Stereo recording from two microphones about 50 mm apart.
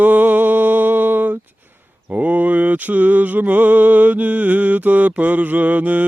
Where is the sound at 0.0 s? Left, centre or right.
Right.